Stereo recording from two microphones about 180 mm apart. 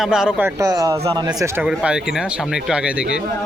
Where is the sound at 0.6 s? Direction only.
20° right (ahead or behind).